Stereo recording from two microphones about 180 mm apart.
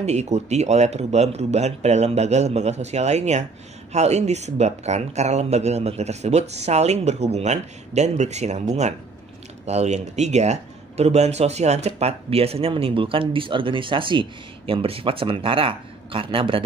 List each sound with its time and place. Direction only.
0.0 s speech: 40° right (ahead or behind)
9.7 s speech: 40° right (ahead or behind)